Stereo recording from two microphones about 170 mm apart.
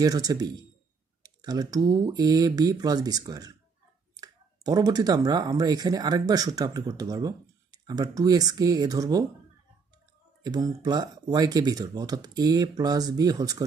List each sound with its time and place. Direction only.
0.0 s speech: 20° right (ahead or behind)
10.4 s speech: 25° right (ahead or behind)